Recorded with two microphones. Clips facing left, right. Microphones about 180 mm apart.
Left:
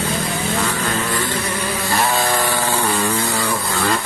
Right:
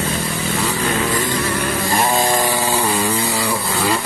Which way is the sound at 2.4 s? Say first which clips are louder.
Right 1 dB; 10° right (ahead or behind).